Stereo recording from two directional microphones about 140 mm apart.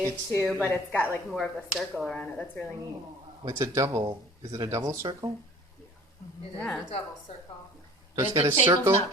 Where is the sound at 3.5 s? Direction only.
20° right (ahead or behind).